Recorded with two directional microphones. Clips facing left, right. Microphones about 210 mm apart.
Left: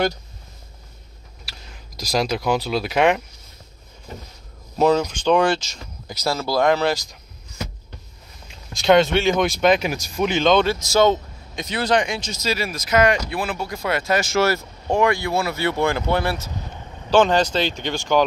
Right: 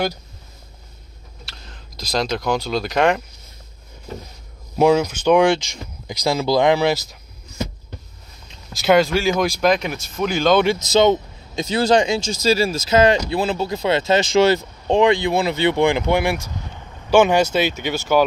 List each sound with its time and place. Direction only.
1.4 s speech: 10° left (ahead or behind)
4.7 s speech: 10° right (ahead or behind)
8.7 s speech: centre (ahead or behind)
10.6 s speech: 20° right (ahead or behind)